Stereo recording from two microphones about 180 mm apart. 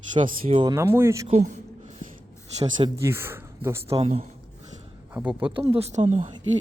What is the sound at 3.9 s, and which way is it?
Speech, 35° right (ahead or behind).